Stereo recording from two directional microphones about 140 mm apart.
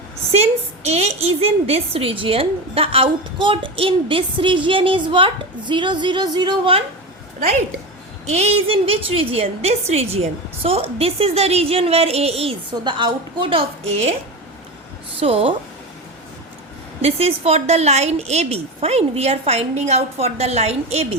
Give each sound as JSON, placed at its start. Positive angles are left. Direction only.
{"t": 0.9, "sound": "a woman's voice", "side_deg": -50}
{"t": 8.3, "sound": "a woman's voice", "side_deg": -50}
{"t": 15.2, "sound": "a woman's voice", "side_deg": -40}
{"t": 17.0, "sound": "a woman's voice", "side_deg": -45}